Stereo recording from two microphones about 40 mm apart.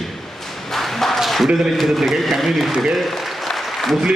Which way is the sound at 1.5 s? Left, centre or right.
Centre.